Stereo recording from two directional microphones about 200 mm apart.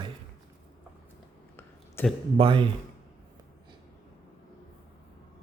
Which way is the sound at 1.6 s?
10° left (ahead or behind).